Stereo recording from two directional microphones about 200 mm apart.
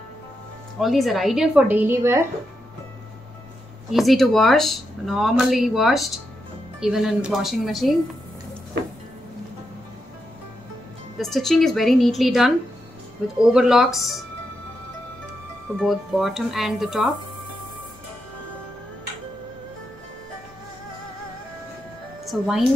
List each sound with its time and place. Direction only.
0.7 s speech: centre (ahead or behind)
3.9 s speech: centre (ahead or behind)
8.8 s a sound: 55° right (ahead or behind)
11.1 s speech: centre (ahead or behind)
15.8 s speech: centre (ahead or behind)
22.2 s a woman's voice: centre (ahead or behind)